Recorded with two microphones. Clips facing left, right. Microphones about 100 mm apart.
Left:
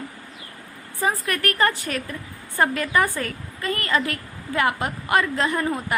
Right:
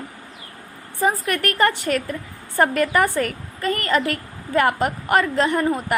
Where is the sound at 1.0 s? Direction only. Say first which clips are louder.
Right 3 dB; 25° right (ahead or behind).